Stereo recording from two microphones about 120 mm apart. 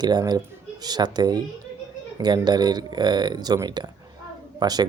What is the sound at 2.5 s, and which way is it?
A child's voice, 35° right (ahead or behind).